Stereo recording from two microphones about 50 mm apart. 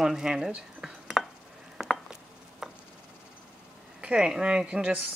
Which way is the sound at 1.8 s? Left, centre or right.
Centre.